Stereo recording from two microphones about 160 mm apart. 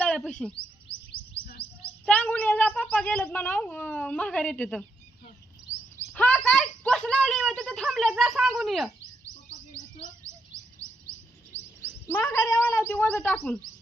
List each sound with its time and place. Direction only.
0.0 s bird: 5° left (ahead or behind)
2.0 s speech: 10° left (ahead or behind)
6.1 s speech: 10° left (ahead or behind)
10.2 s bird: 20° right (ahead or behind)
11.5 s a sound: 15° right (ahead or behind)
12.0 s speech: 15° left (ahead or behind)